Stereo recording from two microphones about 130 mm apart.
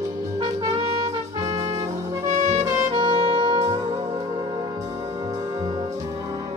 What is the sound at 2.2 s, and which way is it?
Music, 65° right (ahead or behind).